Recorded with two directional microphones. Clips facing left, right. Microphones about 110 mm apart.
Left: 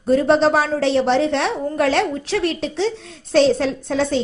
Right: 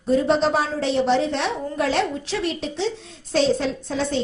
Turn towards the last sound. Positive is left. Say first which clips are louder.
# left 4 dB
turn(degrees=75)  # may be behind; listen again after turning